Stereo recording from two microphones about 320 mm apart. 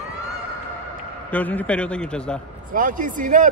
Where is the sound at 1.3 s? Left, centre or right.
Centre.